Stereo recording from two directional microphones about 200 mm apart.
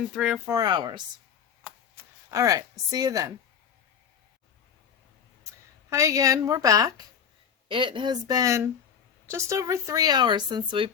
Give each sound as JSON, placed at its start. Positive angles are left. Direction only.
{"t": 0.1, "sound": "a woman's voice", "side_deg": -5}
{"t": 0.5, "sound": "speech", "side_deg": -20}
{"t": 1.6, "sound": "a sound", "side_deg": 0}
{"t": 2.0, "sound": "speech", "side_deg": -15}
{"t": 5.9, "sound": "a woman's voice", "side_deg": -15}